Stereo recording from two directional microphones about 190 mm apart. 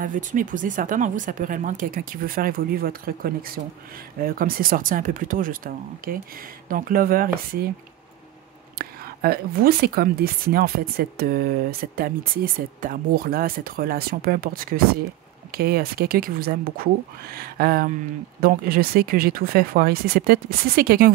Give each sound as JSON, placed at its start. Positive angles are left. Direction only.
{"t": 0.0, "sound": "speech", "side_deg": -45}
{"t": 8.7, "sound": "speech", "side_deg": -50}